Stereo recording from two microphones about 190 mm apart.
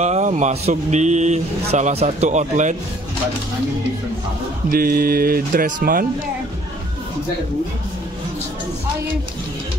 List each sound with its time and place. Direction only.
0.0 s speech: 40° right (ahead or behind)
4.6 s speech: 50° right (ahead or behind)